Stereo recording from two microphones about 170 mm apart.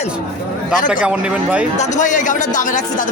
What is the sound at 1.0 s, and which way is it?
Speech, 5° right (ahead or behind).